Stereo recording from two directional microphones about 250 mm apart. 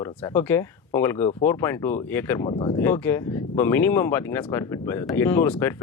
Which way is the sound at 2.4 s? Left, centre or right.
Left.